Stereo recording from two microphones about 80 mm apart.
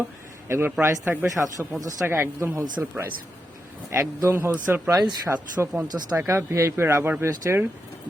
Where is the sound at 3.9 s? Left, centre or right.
Right.